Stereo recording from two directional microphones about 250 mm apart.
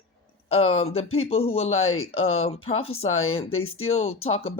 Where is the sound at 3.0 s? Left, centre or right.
Left.